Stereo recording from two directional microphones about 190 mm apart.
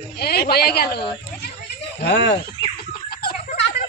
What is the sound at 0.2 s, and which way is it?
A woman's voice, 55° left (ahead or behind).